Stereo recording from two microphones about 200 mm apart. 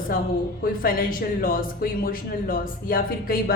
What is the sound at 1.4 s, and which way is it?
Speech, 45° left (ahead or behind).